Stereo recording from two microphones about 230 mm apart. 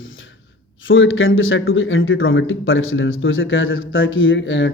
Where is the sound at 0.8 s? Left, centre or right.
Left.